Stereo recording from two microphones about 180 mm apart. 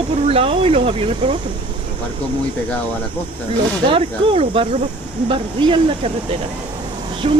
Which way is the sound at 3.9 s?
30° right (ahead or behind).